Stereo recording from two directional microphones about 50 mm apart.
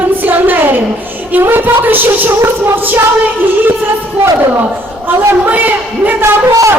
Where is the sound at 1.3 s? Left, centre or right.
Right.